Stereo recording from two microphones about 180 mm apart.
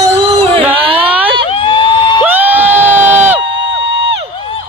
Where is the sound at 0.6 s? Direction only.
10° right (ahead or behind).